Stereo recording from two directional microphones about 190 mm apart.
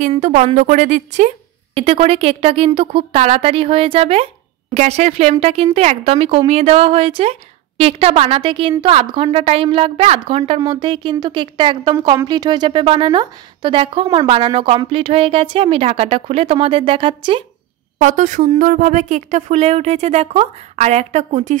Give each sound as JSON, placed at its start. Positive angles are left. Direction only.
{"t": 0.1, "sound": "speech", "side_deg": -35}
{"t": 18.0, "sound": "speech", "side_deg": -40}